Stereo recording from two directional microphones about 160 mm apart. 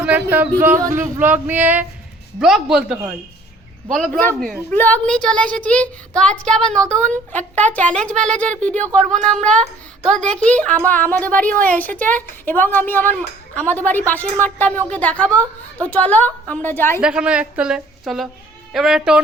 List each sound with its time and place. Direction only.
0.0 s music: 10° right (ahead or behind)
0.6 s a woman's voice: 15° right (ahead or behind); by 17.0 s 10° left (ahead or behind)
17.0 s a woman's voice: 5° right (ahead or behind)